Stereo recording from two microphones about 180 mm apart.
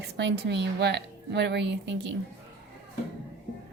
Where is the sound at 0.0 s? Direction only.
70° right (ahead or behind).